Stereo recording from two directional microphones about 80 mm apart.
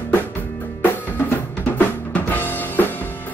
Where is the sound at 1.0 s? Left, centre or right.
Left.